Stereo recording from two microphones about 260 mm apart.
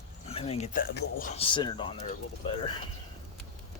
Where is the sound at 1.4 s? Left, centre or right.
Centre.